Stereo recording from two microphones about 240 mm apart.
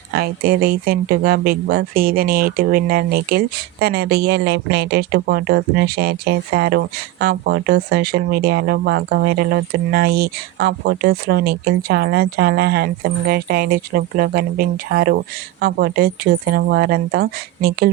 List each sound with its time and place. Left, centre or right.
0.1 s speech: right